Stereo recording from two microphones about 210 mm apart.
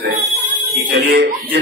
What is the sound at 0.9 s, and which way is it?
Speech, 55° right (ahead or behind).